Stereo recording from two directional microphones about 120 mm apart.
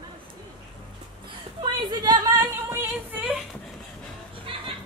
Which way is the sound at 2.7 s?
15° right (ahead or behind).